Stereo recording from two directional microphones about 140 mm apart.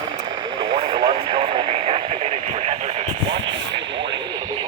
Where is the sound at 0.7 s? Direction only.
50° right (ahead or behind).